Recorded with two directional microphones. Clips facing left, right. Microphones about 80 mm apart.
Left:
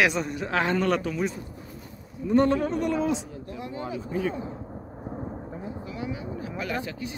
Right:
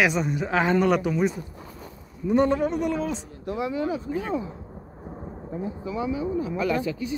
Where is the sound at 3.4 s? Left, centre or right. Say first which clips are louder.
Right 8 dB; right.